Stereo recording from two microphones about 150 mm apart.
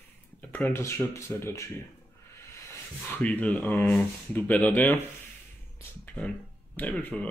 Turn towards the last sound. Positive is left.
turn(degrees=10)  # may be behind; listen again after turning